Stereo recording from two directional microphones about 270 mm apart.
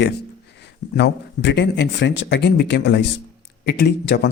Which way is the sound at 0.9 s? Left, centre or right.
Left.